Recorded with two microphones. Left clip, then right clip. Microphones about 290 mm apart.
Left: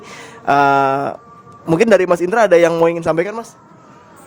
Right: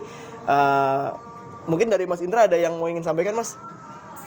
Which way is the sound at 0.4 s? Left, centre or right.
Left.